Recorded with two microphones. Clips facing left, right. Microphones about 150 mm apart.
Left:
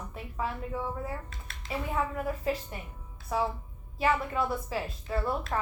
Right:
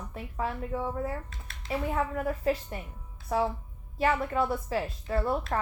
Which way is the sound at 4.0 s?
45° right (ahead or behind).